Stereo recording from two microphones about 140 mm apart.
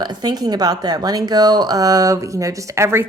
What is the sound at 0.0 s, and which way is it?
Speech, 30° right (ahead or behind).